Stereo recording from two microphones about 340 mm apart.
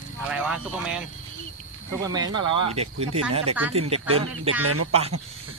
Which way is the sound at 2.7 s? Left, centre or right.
Centre.